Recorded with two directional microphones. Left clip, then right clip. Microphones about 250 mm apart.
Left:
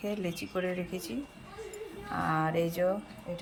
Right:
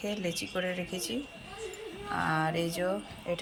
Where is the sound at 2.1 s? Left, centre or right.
Centre.